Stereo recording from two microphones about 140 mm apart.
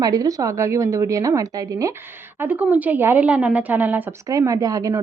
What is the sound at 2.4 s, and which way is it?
A woman's voice, 10° right (ahead or behind).